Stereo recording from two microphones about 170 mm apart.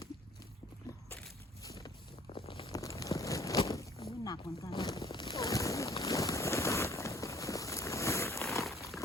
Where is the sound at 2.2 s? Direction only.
35° left (ahead or behind).